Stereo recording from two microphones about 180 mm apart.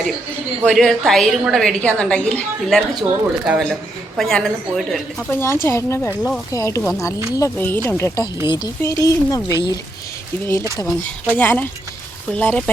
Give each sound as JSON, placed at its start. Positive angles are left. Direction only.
{"t": 0.6, "sound": "a woman's voice", "side_deg": 0}
{"t": 5.3, "sound": "speech", "side_deg": 15}
{"t": 10.8, "sound": "speech", "side_deg": 10}